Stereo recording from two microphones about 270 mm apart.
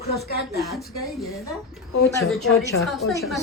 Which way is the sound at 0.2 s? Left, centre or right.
Left.